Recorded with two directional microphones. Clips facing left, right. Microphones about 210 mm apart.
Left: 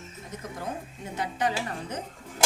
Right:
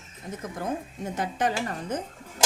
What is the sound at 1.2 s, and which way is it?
Speech, 50° right (ahead or behind).